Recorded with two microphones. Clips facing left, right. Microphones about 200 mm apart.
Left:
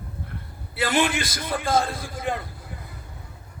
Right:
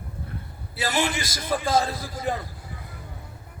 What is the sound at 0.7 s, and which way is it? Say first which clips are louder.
A man's voice: left 3 dB; 60° left (ahead or behind).